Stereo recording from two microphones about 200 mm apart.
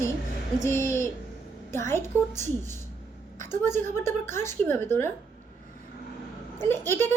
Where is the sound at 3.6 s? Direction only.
10° left (ahead or behind).